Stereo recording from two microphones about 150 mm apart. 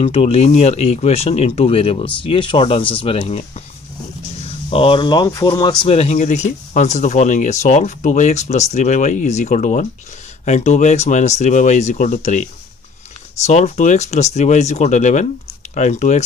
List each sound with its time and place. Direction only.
0.0 s speech: 40° left (ahead or behind)
4.6 s speech: 40° left (ahead or behind)